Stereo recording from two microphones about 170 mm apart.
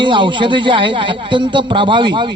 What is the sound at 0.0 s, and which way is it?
Speech, 30° right (ahead or behind).